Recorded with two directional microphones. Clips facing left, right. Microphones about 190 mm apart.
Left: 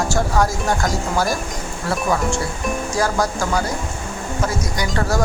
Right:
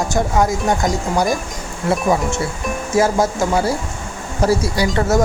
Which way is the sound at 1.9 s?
20° right (ahead or behind).